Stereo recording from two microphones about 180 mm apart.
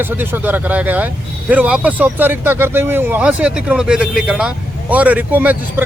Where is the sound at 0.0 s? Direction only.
10° right (ahead or behind).